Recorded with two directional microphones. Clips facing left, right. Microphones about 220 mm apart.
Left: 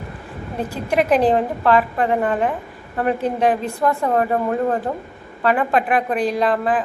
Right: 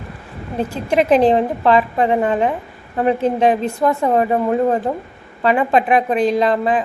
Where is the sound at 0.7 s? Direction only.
25° right (ahead or behind).